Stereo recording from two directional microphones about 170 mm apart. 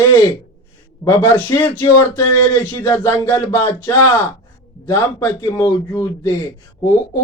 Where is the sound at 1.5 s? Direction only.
10° left (ahead or behind).